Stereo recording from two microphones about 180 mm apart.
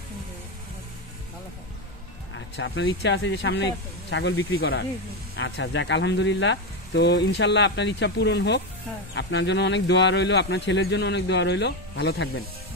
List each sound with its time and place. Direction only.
2.3 s speech: 90° left; by 4.8 s 70° left (ahead or behind)
5.3 s speech: 85° left
9.1 s speech: 80° left